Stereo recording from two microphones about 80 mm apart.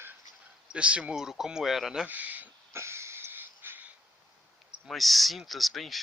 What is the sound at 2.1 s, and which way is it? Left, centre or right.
Speech, right.